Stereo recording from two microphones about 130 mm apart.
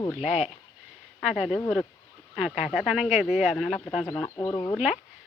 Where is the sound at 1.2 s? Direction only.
5° right (ahead or behind).